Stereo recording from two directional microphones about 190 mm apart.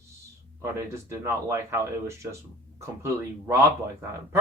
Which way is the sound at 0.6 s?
15° right (ahead or behind).